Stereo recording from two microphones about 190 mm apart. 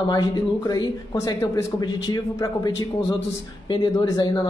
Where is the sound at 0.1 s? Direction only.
20° left (ahead or behind).